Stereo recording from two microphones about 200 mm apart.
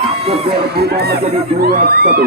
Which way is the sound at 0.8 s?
50° right (ahead or behind).